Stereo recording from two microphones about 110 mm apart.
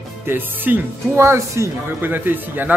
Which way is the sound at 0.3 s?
15° right (ahead or behind).